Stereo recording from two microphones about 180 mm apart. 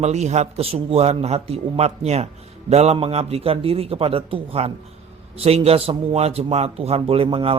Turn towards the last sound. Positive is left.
turn(degrees=-30)  # may be behind; listen again after turning